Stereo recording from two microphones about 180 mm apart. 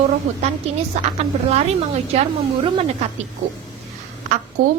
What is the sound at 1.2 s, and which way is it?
A woman's voice, 35° right (ahead or behind).